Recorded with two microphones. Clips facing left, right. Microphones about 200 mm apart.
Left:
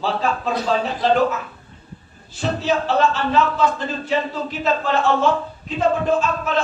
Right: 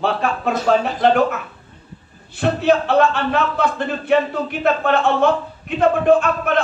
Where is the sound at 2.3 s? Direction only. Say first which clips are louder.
Right 5 dB; 60° right (ahead or behind).